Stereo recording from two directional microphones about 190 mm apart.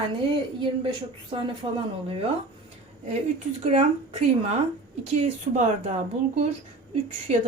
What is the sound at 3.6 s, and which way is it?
Speech, 35° right (ahead or behind).